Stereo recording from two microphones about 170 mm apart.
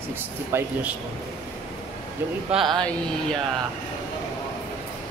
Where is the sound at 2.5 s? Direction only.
Centre (ahead or behind).